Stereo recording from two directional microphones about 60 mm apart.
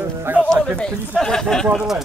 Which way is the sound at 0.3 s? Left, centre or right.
Right.